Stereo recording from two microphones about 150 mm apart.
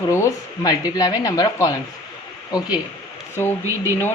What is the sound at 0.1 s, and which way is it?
Speech, 20° left (ahead or behind).